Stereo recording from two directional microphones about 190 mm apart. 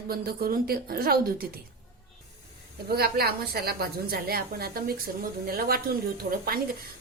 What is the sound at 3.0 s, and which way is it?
A woman's voice, 55° right (ahead or behind).